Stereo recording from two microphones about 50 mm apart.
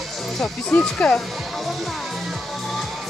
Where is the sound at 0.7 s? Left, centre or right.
Left.